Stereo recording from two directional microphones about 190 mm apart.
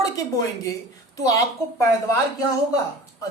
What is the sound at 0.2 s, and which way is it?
A woman's voice, 20° left (ahead or behind).